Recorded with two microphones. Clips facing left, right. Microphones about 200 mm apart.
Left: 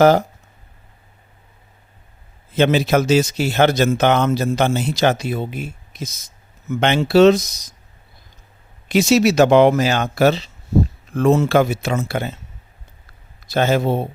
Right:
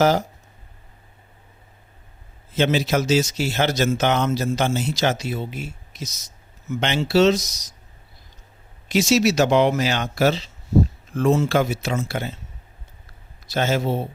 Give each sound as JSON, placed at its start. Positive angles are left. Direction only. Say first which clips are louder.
{"t": 0.0, "sound": "a man's voice", "louder": "left 6 dB", "side_deg": 55}
{"t": 2.6, "sound": "a man's voice", "louder": "left 4 dB", "side_deg": 55}
{"t": 8.9, "sound": "a man's voice", "louder": "left 4 dB", "side_deg": 55}
{"t": 13.5, "sound": "a man's voice", "louder": "left 4 dB", "side_deg": 55}